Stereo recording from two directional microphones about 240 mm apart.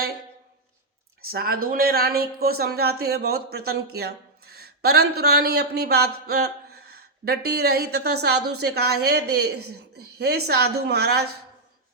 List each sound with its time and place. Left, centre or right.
1.2 s a woman's voice: right